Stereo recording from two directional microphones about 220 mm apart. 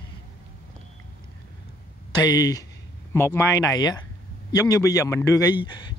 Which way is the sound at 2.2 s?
15° left (ahead or behind).